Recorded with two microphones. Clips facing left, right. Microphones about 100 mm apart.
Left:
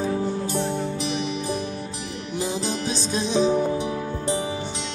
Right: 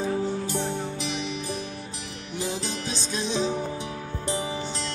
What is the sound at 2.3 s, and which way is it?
Music, 20° left (ahead or behind).